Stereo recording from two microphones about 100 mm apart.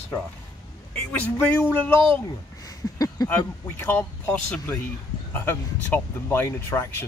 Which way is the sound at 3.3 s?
25° left (ahead or behind).